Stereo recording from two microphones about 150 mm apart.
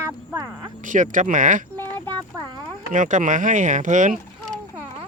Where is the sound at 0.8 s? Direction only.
60° right (ahead or behind).